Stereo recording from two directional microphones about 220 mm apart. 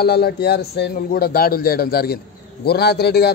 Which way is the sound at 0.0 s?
45° left (ahead or behind).